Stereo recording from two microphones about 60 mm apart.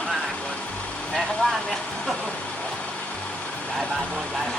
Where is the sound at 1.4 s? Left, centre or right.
Centre.